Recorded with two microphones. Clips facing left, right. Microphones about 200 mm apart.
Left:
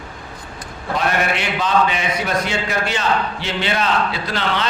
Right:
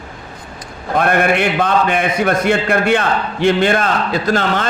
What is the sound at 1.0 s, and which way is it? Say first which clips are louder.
Mantra: right 7 dB; 55° right (ahead or behind).